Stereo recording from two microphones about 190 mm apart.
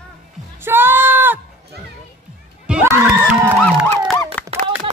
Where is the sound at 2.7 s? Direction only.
5° right (ahead or behind).